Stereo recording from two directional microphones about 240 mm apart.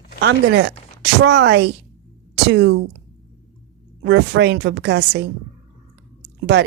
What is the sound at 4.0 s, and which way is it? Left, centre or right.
Speech, right.